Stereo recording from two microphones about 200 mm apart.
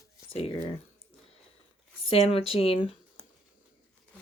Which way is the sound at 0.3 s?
30° left (ahead or behind).